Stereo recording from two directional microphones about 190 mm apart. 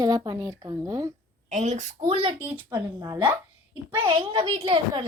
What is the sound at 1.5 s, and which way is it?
Speech, 40° right (ahead or behind).